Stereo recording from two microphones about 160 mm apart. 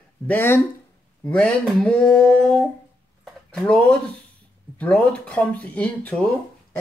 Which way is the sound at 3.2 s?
5° left (ahead or behind).